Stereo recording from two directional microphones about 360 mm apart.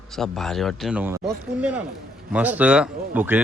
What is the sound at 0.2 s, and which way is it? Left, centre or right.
A man's voice, centre.